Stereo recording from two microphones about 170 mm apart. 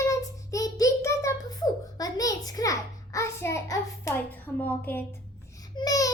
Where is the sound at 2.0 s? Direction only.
20° left (ahead or behind).